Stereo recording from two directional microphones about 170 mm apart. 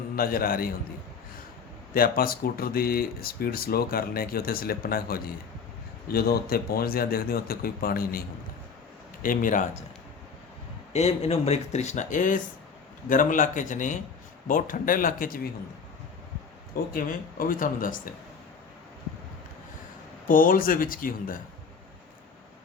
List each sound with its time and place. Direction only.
0.2 s speech: 60° left (ahead or behind)
1.9 s speech: 60° left (ahead or behind)
9.2 s speech: 50° left (ahead or behind)
10.9 s speech: 40° left (ahead or behind); by 15.4 s 55° left (ahead or behind)
16.9 s speech: 55° left (ahead or behind)
20.2 s speech: 55° left (ahead or behind)